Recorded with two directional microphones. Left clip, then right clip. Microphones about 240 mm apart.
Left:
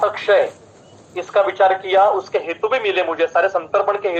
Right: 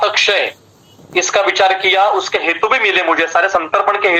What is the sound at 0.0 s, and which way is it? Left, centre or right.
A man's voice, right.